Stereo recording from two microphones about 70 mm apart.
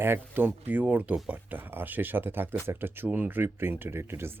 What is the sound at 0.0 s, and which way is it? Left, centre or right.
Speech, right.